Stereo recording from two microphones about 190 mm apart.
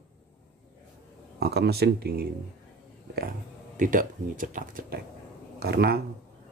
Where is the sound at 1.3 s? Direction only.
55° right (ahead or behind).